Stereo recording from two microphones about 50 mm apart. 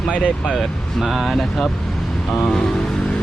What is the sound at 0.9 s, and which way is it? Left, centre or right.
Speech, centre.